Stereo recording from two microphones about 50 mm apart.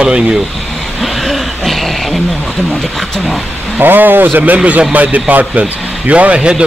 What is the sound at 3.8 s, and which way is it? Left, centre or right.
A man's voice, right.